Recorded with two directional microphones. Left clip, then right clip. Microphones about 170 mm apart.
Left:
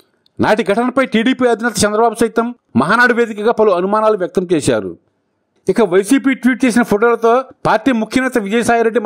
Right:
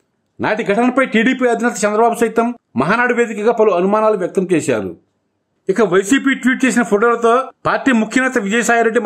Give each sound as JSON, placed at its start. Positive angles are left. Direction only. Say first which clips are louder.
{"t": 0.4, "sound": "a man's voice", "louder": "left 2 dB", "side_deg": 50}